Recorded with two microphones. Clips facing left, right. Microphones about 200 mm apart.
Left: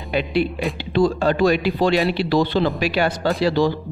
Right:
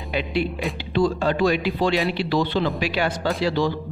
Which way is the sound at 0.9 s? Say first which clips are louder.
Left 3 dB; 40° left (ahead or behind).